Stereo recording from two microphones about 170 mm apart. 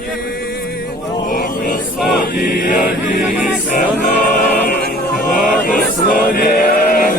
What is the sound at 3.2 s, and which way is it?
Chant, 5° right (ahead or behind).